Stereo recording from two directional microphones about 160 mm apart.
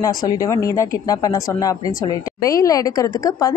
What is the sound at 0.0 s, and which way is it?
A woman's voice, 20° left (ahead or behind).